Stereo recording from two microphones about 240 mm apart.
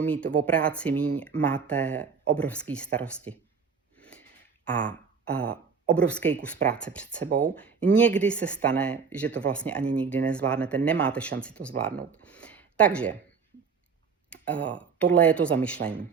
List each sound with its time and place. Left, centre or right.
0.0 s speech: centre
4.0 s wheeze: centre
4.7 s a sound: centre
5.9 s speech: centre
7.3 s speech: right
7.6 s speech: centre
14.3 s speech: centre